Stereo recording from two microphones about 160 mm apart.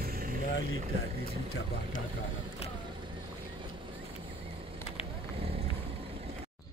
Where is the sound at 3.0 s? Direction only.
30° right (ahead or behind).